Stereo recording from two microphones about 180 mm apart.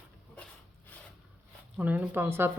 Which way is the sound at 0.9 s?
10° left (ahead or behind).